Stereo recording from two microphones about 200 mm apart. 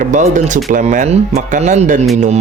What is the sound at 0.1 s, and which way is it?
Speech, 40° right (ahead or behind).